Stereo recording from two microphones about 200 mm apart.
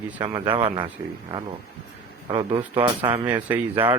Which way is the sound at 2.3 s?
25° right (ahead or behind).